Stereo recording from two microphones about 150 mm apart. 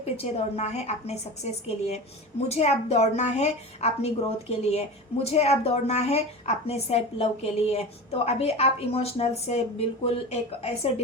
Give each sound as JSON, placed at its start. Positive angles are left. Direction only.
{"t": 0.0, "sound": "a woman's voice", "side_deg": 45}